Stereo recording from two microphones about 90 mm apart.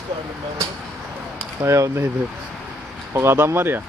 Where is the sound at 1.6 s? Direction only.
35° right (ahead or behind).